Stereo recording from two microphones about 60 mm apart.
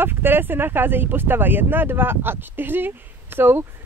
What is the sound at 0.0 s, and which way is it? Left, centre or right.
Speech, right.